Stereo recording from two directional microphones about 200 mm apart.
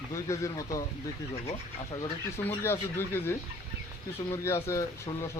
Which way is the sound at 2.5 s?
10° left (ahead or behind).